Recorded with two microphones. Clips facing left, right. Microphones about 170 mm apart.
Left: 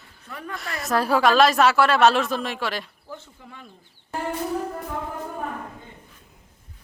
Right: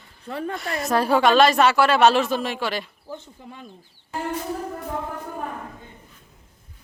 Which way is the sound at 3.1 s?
20° right (ahead or behind).